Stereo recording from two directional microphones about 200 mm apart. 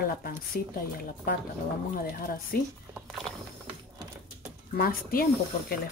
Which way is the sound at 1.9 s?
45° left (ahead or behind).